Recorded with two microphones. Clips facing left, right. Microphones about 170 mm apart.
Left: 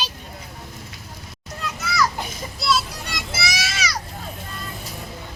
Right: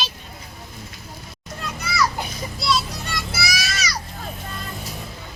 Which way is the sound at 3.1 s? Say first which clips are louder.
Right 1 dB; 20° left (ahead or behind).